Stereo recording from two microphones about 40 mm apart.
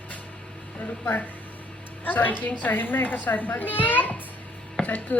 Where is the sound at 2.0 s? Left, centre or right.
Left.